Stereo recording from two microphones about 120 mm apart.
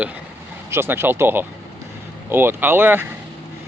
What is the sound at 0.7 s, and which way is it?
Speech, 20° right (ahead or behind).